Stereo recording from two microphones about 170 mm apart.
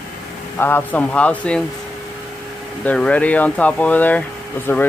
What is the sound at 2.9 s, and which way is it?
Speech, 5° left (ahead or behind).